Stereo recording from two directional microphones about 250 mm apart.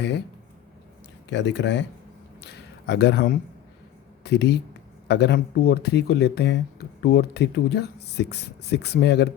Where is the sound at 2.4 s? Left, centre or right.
Left.